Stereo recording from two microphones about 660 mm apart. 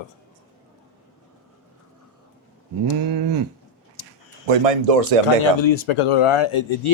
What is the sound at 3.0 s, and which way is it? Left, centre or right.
Livestock, right.